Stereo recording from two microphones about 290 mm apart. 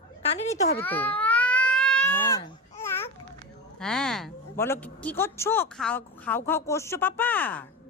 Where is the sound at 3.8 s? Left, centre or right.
Centre.